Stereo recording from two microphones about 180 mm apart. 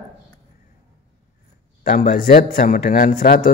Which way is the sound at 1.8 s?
50° left (ahead or behind).